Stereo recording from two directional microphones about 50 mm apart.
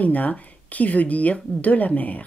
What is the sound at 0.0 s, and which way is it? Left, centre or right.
Speech, left.